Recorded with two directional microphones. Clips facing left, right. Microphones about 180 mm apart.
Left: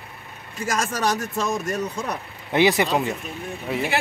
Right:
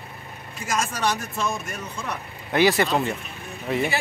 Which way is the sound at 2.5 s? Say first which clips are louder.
Left 1 dB; 20° left (ahead or behind).